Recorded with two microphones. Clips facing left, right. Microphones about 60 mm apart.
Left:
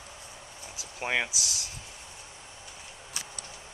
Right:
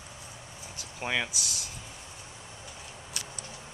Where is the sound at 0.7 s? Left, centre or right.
Centre.